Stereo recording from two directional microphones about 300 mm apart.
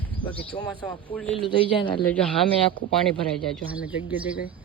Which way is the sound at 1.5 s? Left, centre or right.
Centre.